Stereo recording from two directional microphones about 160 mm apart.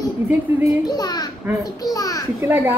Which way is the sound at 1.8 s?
20° left (ahead or behind).